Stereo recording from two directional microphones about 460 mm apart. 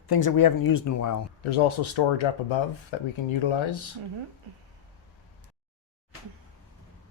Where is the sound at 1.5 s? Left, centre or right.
Left.